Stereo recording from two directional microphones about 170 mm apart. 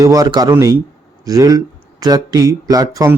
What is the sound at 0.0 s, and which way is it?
Speech, 20° right (ahead or behind).